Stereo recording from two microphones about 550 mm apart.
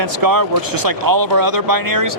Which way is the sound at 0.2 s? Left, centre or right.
Right.